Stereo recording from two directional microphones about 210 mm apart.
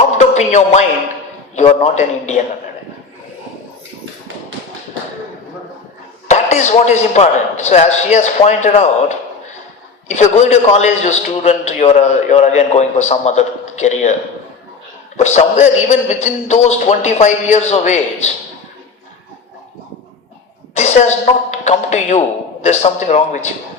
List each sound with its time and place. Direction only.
0.2 s a man's voice: 35° left (ahead or behind)
6.2 s a man's voice: 35° left (ahead or behind)
10.2 s a man's voice: 30° left (ahead or behind)
15.2 s a man's voice: 35° left (ahead or behind)
20.7 s a sound: 35° left (ahead or behind)
21.5 s a man's voice: 30° left (ahead or behind)